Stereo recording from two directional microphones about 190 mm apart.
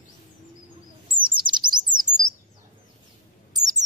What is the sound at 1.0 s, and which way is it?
Chirp, 25° right (ahead or behind).